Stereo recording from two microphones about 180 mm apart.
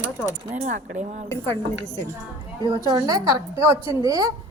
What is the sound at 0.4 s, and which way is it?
Speech, 45° right (ahead or behind).